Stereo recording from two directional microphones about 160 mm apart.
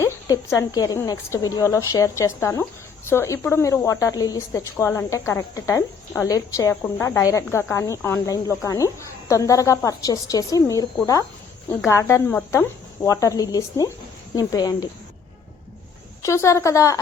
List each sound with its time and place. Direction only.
0.0 s a woman's voice: 20° left (ahead or behind)
11.9 s a woman's voice: 20° left (ahead or behind)
16.2 s a woman's voice: 20° left (ahead or behind)